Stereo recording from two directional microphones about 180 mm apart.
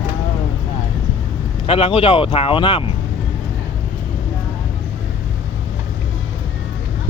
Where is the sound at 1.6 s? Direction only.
30° left (ahead or behind).